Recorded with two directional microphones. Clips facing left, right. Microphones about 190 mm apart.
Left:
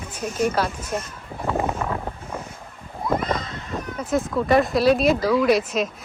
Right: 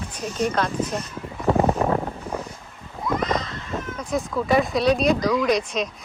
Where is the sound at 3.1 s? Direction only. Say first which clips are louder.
Even; 55° left (ahead or behind).